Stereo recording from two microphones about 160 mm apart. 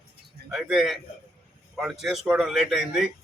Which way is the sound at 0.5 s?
5° right (ahead or behind).